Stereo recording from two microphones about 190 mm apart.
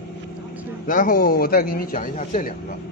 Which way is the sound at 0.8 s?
45° left (ahead or behind).